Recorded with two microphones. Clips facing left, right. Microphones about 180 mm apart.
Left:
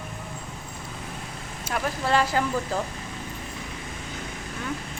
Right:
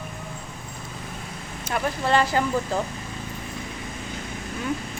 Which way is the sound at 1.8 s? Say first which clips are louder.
Right 2 dB; centre (ahead or behind).